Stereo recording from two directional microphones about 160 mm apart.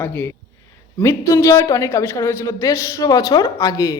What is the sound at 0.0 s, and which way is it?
A man's voice, 15° left (ahead or behind).